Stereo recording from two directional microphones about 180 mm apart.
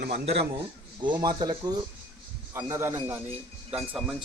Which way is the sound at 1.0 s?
25° right (ahead or behind).